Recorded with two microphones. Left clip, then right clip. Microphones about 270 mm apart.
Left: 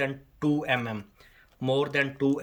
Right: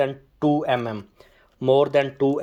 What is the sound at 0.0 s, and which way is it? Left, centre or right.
Speech, centre.